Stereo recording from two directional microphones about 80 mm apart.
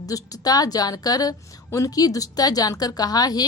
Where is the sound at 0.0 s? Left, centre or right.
Left.